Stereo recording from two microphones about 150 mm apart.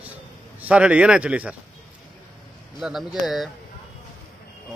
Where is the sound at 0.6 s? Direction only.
10° right (ahead or behind).